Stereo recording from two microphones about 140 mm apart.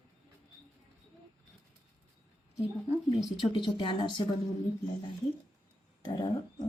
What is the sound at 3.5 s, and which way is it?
Speech, 35° left (ahead or behind).